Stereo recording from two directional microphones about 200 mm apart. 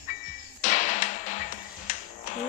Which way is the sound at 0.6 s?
40° left (ahead or behind).